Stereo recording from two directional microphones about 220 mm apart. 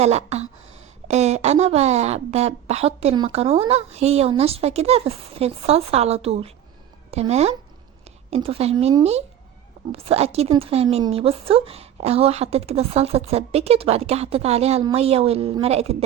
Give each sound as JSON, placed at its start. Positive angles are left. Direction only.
{"t": 0.0, "sound": "speech", "side_deg": -30}